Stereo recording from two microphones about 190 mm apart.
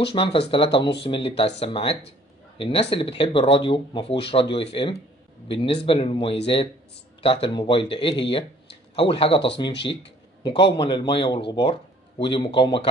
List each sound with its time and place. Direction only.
0.0 s a man's voice: 30° left (ahead or behind)